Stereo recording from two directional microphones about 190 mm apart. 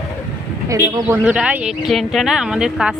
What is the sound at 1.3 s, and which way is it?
Speech, 5° right (ahead or behind).